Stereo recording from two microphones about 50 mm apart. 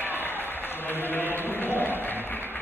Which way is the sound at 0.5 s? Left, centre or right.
Left.